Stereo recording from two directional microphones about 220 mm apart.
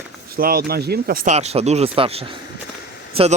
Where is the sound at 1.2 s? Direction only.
30° right (ahead or behind).